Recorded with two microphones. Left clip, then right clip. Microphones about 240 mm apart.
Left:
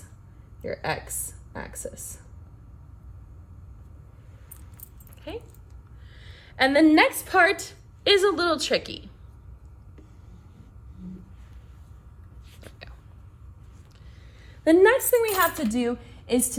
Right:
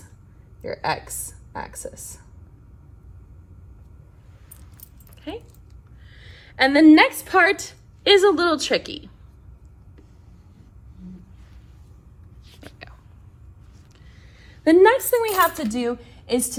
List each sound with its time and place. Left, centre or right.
1.3 s speech: centre
5.3 s a woman's voice: right
14.3 s a sound: right
15.1 s a woman's voice: centre